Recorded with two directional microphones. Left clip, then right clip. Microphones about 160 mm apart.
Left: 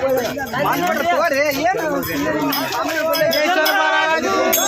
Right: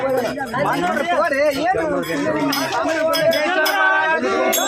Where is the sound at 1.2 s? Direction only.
30° left (ahead or behind).